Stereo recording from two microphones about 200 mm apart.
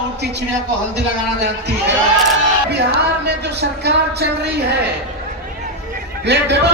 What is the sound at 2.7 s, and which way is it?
Speech, 55° right (ahead or behind).